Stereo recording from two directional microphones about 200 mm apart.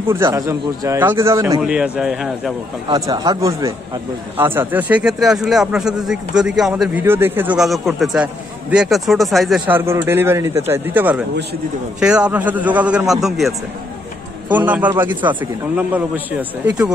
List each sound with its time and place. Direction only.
0.1 s speech: 15° right (ahead or behind)
2.9 s speech: 20° right (ahead or behind); by 13.6 s centre (ahead or behind)
14.7 s speech: 10° right (ahead or behind)